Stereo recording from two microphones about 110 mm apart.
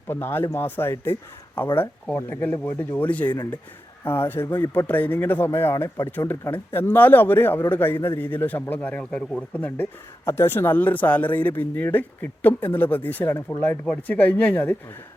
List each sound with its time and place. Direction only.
0.1 s a man's voice: 20° left (ahead or behind)